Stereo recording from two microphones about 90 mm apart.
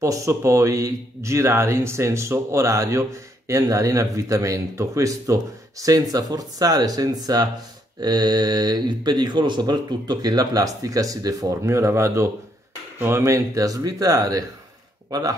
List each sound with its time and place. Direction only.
0.0 s speech: 35° right (ahead or behind)